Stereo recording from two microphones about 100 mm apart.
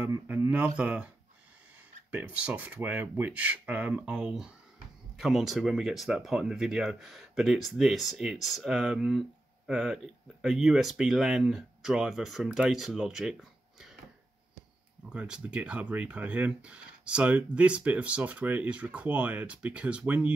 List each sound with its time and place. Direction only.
0.0 s speech: 20° right (ahead or behind); by 13.9 s 5° right (ahead or behind)
15.0 s speech: 10° right (ahead or behind)